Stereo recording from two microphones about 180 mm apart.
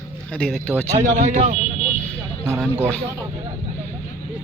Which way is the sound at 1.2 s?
40° right (ahead or behind).